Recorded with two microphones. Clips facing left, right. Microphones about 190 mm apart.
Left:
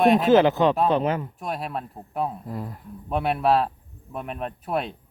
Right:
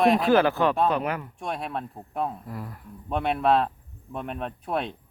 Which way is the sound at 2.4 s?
25° left (ahead or behind).